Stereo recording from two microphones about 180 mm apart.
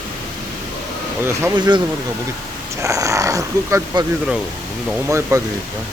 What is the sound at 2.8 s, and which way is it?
Speech, 15° right (ahead or behind).